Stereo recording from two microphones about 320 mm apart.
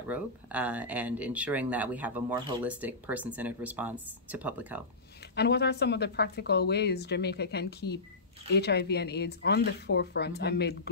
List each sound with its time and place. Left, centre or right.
0.1 s speech: centre
5.3 s speech: left